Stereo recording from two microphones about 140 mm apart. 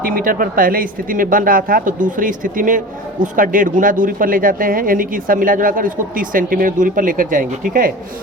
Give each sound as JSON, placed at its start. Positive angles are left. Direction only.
{"t": 0.0, "sound": "speech", "side_deg": -85}